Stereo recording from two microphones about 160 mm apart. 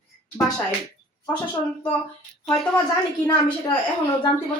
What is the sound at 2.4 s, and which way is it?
Speech, centre (ahead or behind).